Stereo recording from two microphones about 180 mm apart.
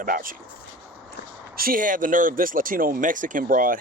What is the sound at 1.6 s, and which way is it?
Speech, 50° right (ahead or behind).